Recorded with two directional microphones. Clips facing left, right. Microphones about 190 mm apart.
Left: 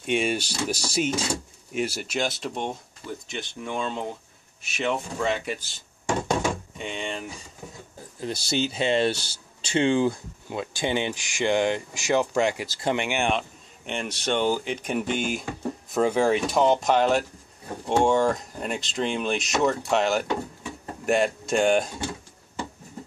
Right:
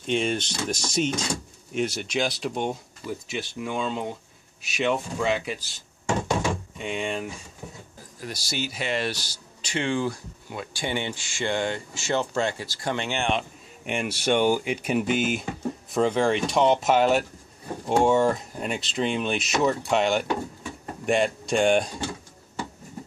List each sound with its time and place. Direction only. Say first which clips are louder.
0.0 s speech: even; 10° left (ahead or behind)
6.8 s speech: right 3 dB; 5° right (ahead or behind)
8.2 s speech: left 5 dB; 25° left (ahead or behind)
13.4 s speech: right 1 dB; 10° right (ahead or behind)
15.9 s speech: left 1 dB; 10° left (ahead or behind)